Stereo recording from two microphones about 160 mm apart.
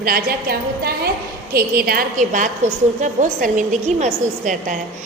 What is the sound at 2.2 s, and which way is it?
A woman's voice, 50° right (ahead or behind).